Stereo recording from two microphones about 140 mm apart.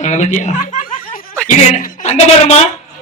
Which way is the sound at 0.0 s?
60° left (ahead or behind).